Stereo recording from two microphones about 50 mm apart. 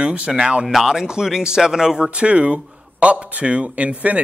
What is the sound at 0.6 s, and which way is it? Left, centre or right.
A man's voice, centre.